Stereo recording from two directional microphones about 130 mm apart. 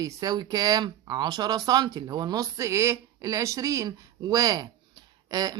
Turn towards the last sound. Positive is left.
turn(degrees=-30)  # may be behind; listen again after turning